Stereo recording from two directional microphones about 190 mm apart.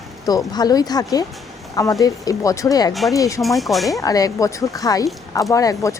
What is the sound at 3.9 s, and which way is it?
A woman's voice, 20° left (ahead or behind).